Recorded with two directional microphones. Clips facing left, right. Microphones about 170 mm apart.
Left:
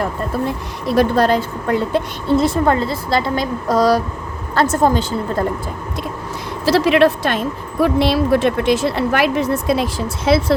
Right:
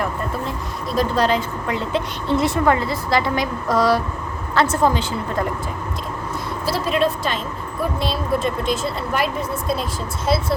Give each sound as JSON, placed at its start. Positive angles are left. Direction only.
{"t": 0.4, "sound": "speech", "side_deg": 65}
{"t": 2.6, "sound": "a woman's voice", "side_deg": 30}
{"t": 6.7, "sound": "speech", "side_deg": 85}